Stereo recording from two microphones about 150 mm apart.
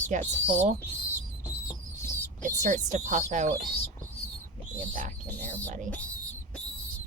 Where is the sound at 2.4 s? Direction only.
55° right (ahead or behind).